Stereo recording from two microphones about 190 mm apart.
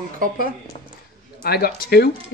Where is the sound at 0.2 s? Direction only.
50° right (ahead or behind).